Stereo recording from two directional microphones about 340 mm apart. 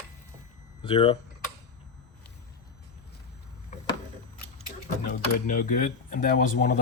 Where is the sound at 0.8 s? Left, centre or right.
Centre.